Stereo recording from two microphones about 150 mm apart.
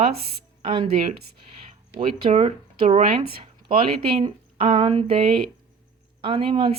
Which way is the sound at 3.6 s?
35° right (ahead or behind).